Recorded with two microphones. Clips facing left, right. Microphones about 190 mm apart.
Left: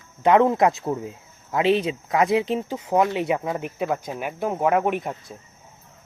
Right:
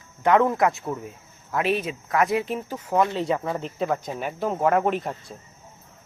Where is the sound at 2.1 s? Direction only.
20° left (ahead or behind).